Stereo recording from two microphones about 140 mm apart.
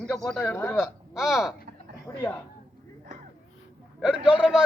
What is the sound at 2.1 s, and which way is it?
Speech, 20° left (ahead or behind).